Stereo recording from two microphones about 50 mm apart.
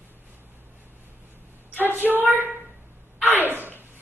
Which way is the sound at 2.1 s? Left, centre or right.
Right.